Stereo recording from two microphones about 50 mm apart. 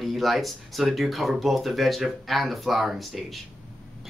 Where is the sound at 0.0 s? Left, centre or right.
Centre.